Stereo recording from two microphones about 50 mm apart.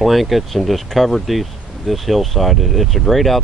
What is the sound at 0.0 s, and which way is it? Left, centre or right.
Speech, centre.